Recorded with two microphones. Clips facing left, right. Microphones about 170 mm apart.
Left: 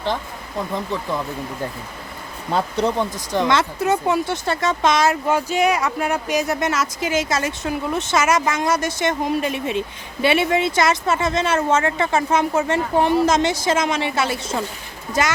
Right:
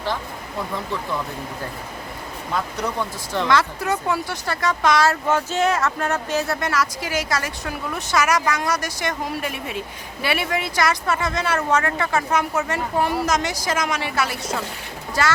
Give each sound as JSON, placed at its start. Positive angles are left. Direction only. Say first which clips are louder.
{"t": 2.5, "sound": "speech", "louder": "left 6 dB", "side_deg": 30}